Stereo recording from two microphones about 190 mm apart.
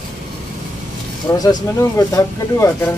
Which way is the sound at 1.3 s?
20° left (ahead or behind).